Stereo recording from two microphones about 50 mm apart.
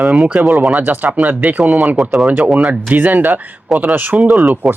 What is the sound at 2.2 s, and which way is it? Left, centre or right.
Speech, right.